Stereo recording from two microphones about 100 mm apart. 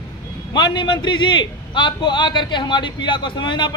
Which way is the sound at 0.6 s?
50° left (ahead or behind).